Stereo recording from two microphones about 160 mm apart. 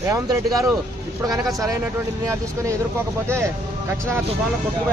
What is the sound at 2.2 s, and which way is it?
Speech, 20° right (ahead or behind).